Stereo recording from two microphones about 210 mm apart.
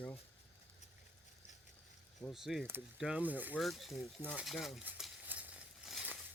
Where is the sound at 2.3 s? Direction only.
Centre (ahead or behind).